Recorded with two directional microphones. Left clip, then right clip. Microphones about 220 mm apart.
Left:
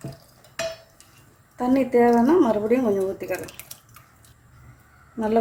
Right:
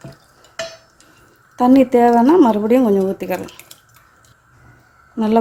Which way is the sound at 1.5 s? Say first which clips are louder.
Right 8 dB; 40° right (ahead or behind).